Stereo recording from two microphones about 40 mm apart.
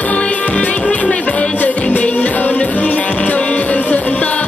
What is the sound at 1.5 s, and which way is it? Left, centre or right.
Music, left.